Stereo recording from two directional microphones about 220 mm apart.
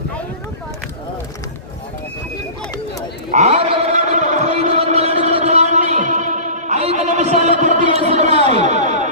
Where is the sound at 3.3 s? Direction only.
30° right (ahead or behind).